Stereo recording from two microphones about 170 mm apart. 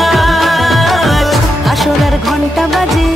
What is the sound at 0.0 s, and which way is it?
Music, centre (ahead or behind).